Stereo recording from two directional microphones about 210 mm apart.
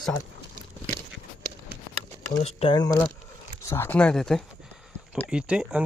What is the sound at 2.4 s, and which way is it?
Speech, 30° left (ahead or behind).